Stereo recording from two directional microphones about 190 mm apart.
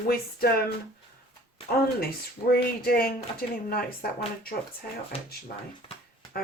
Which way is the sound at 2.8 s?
50° left (ahead or behind).